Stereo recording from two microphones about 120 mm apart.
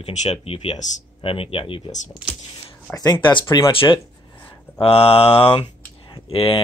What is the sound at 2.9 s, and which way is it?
Speech, 10° left (ahead or behind).